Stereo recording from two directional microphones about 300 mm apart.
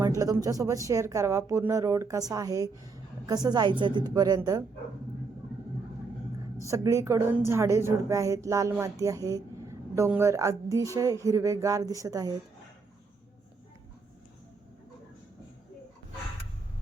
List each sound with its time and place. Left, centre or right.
0.2 s a woman's voice: centre
6.7 s a woman's voice: centre